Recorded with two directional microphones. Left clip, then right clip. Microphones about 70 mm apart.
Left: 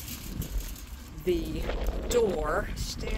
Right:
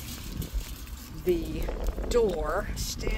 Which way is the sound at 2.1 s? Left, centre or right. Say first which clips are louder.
Right 1 dB; left.